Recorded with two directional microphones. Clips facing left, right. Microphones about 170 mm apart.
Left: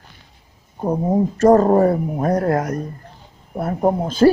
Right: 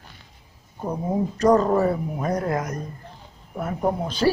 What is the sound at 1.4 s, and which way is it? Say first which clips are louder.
Speech: left 5 dB; 45° left (ahead or behind).